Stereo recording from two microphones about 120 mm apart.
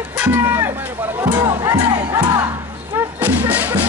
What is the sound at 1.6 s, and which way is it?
Music, 30° right (ahead or behind).